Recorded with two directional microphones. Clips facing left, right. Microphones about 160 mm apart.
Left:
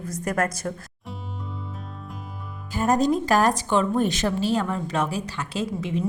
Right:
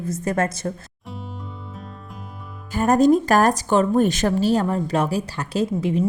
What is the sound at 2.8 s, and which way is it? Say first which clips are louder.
A woman's voice: right 5 dB; 55° right (ahead or behind).